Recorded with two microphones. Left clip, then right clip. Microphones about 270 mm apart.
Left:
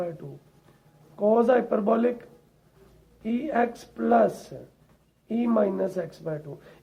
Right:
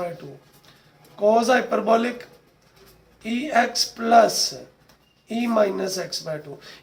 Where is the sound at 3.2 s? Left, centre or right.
Left.